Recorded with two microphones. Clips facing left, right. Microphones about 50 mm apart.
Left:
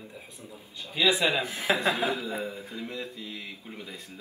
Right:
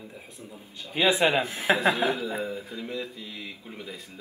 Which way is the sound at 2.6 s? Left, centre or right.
Centre.